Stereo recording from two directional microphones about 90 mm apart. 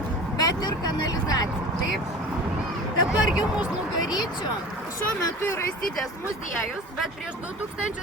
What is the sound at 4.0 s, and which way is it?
Speech, 50° left (ahead or behind).